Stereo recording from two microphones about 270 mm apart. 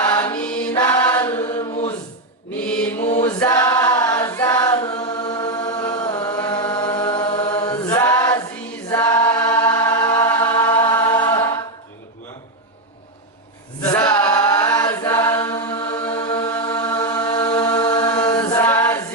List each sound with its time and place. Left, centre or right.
0.1 s chant: centre
3.2 s chant: centre
13.8 s chant: centre